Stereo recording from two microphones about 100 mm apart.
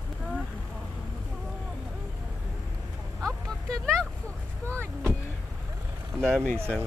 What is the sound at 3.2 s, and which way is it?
Speech, 5° left (ahead or behind).